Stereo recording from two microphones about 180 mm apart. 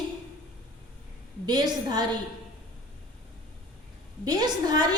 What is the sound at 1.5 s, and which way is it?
Speech, 25° right (ahead or behind).